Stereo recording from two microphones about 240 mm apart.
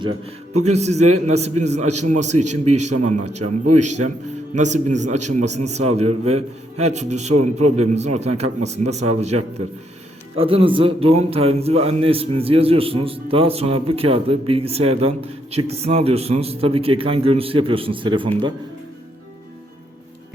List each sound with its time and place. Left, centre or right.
0.0 s a man's voice: right
2.7 s a man's voice: right
3.1 s a man's voice: right
3.4 s a man's voice: right
4.5 s a man's voice: right
7.3 s a man's voice: right
7.9 s a man's voice: right